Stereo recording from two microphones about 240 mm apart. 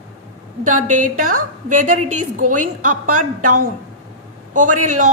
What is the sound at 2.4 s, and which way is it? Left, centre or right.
Speech, right.